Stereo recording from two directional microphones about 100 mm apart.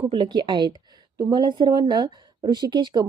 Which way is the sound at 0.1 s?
55° right (ahead or behind).